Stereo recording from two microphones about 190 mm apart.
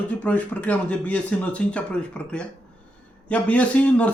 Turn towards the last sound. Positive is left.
turn(degrees=5)  # may be behind; listen again after turning